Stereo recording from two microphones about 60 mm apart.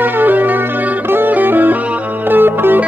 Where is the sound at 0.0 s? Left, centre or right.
Right.